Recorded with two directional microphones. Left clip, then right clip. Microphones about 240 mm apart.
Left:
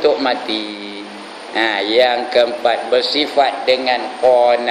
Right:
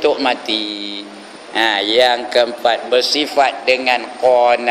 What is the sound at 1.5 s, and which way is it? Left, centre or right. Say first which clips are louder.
A man's voice: right 1 dB; right.